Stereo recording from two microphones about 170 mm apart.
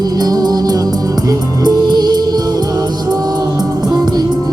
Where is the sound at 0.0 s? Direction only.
25° right (ahead or behind).